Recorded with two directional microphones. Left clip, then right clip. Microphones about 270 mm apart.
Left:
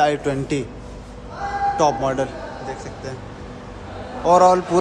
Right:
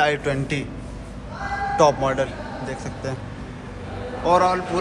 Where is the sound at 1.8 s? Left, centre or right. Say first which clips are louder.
Right 3 dB; centre.